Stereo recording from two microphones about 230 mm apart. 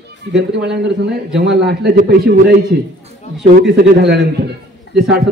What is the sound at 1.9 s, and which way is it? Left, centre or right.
Speech, right.